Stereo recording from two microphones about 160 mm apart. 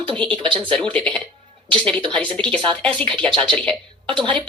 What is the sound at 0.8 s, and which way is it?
Speech, 5° left (ahead or behind).